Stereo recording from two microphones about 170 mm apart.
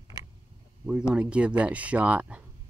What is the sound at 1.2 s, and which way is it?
Speech, 5° right (ahead or behind).